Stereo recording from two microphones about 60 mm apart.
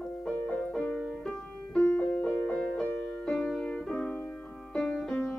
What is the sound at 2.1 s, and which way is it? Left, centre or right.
Music, left.